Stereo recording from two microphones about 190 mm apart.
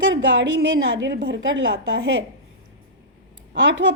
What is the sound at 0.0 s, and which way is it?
A woman's voice, 75° right (ahead or behind).